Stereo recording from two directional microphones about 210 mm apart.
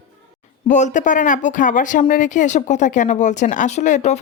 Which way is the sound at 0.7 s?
35° left (ahead or behind).